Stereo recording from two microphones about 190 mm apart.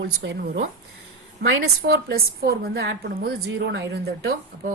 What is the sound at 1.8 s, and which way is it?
A woman's voice, 55° right (ahead or behind).